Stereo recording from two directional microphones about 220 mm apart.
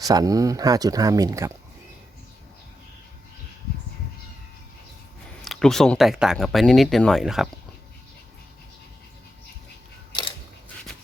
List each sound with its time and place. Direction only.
0.0 s speech: 15° right (ahead or behind)
5.4 s speech: centre (ahead or behind)